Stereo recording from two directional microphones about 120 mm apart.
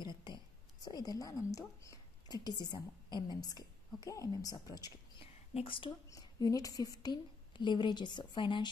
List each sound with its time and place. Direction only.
0.0 s a sound: 40° left (ahead or behind)
0.8 s a woman's voice: 30° left (ahead or behind)
5.2 s whispering: 50° left (ahead or behind)
6.0 s a woman's voice: 30° left (ahead or behind)